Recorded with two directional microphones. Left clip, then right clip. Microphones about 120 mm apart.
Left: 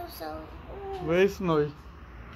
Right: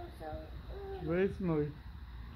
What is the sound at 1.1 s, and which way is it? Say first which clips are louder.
Speech: left 10 dB; 10° right (ahead or behind).